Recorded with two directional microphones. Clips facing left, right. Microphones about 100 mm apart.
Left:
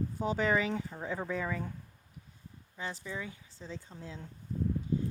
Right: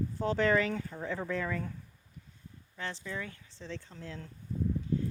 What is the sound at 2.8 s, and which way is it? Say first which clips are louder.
Speech: right 1 dB; 10° left (ahead or behind).